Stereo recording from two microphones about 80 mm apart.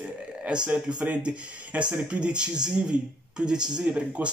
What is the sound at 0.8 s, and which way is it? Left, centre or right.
A man's voice, centre.